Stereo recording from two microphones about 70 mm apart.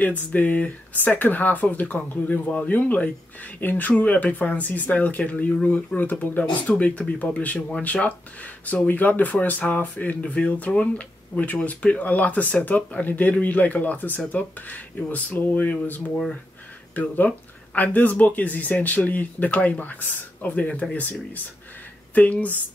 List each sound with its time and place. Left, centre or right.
0.0 s speech: left
16.1 s speech: centre
16.9 s speech: left
22.1 s speech: left